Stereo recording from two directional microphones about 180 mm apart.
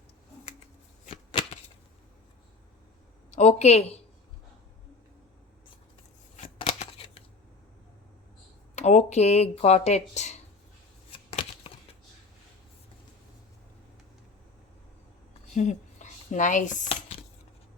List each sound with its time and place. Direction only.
1.0 s shuffling cards: 30° left (ahead or behind)
3.3 s speech: 40° left (ahead or behind)
6.3 s scissors: 35° left (ahead or behind)
8.7 s speech: 40° left (ahead or behind)
15.5 s speech: 40° left (ahead or behind)